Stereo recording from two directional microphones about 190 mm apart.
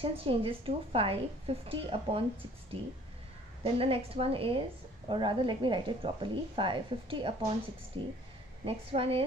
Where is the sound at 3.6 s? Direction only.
30° right (ahead or behind).